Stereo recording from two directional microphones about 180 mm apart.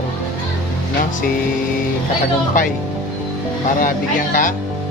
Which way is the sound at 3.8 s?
50° left (ahead or behind).